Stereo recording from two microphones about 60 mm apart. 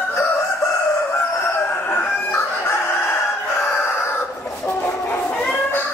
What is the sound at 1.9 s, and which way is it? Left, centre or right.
Chicken, left.